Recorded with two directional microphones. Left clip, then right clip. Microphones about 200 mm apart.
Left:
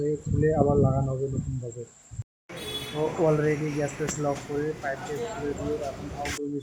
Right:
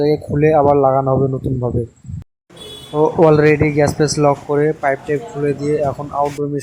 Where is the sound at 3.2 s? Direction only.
35° right (ahead or behind).